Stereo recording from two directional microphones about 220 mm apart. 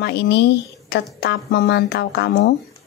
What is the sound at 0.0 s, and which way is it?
Speech, 50° left (ahead or behind).